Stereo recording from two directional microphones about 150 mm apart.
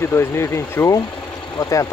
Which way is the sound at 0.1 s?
20° left (ahead or behind).